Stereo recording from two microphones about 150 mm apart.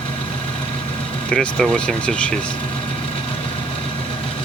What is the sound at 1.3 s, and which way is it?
Speech, 5° left (ahead or behind).